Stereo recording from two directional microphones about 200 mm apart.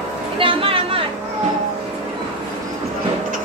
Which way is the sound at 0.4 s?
25° right (ahead or behind).